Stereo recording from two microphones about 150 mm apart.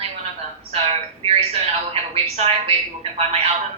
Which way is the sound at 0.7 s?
40° right (ahead or behind).